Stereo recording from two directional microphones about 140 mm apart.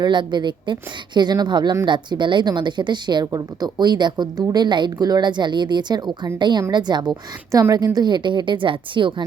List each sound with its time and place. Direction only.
0.0 s a woman's voice: 35° right (ahead or behind)